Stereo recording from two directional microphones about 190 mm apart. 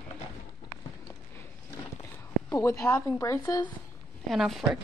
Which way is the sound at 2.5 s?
15° left (ahead or behind).